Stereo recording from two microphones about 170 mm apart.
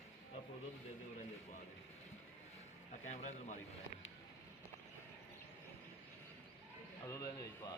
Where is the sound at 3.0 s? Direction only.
45° left (ahead or behind).